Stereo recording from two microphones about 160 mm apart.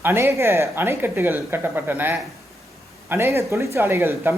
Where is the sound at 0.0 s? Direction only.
15° right (ahead or behind).